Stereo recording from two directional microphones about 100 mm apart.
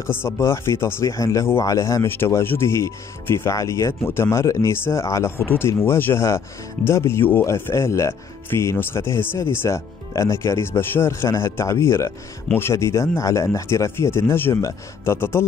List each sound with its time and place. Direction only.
0.0 s speech: 25° left (ahead or behind)